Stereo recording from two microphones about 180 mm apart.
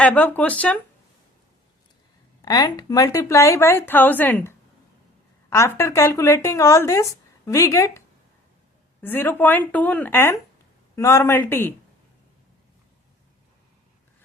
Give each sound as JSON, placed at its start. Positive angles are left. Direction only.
{"t": 0.0, "sound": "speech", "side_deg": 10}
{"t": 2.4, "sound": "speech", "side_deg": 20}